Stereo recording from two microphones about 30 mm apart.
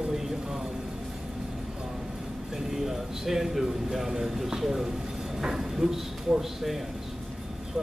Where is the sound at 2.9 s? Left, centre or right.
Centre.